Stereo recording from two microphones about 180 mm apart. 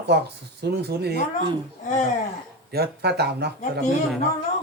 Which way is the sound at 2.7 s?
65° right (ahead or behind).